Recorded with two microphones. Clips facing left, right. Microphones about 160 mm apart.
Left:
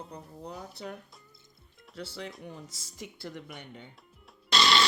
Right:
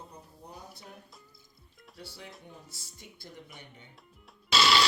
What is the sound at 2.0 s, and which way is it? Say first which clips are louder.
A woman's voice: left 7 dB; 85° left.